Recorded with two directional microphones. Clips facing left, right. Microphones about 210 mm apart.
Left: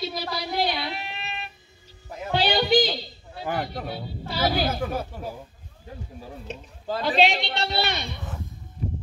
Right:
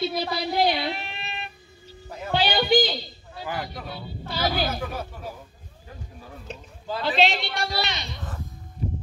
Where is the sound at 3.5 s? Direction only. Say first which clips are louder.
Left 5 dB; 25° left (ahead or behind).